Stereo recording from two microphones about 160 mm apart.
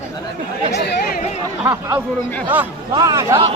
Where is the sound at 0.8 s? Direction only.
80° left.